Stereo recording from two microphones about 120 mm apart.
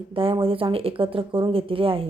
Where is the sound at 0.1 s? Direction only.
50° right (ahead or behind).